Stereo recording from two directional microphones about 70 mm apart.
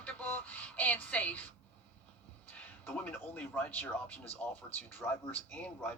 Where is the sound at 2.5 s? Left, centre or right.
Left.